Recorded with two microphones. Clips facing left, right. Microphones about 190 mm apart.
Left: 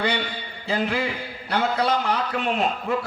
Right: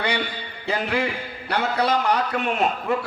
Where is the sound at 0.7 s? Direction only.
60° right (ahead or behind).